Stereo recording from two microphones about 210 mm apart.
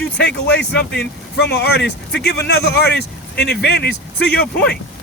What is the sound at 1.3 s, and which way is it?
A man's voice, 50° left (ahead or behind).